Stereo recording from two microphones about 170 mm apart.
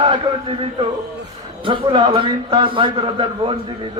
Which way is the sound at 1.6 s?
30° right (ahead or behind).